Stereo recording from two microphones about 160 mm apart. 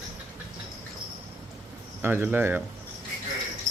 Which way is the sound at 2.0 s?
15° right (ahead or behind).